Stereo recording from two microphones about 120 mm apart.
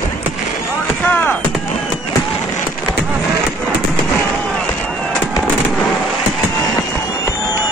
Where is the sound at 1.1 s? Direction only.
15° left (ahead or behind).